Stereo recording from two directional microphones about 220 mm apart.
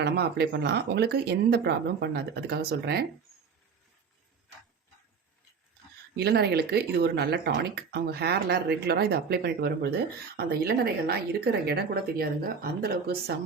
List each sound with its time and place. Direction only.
0.0 s speech: 45° right (ahead or behind)
6.1 s speech: 45° right (ahead or behind)